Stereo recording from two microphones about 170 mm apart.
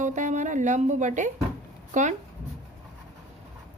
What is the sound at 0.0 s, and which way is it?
Speech, 50° right (ahead or behind).